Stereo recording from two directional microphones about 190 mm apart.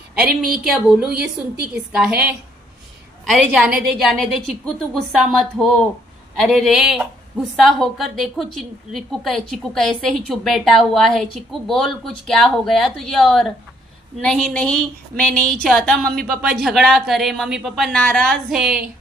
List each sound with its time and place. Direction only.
0.3 s speech: 50° right (ahead or behind)
0.7 s a woman's voice: 5° right (ahead or behind)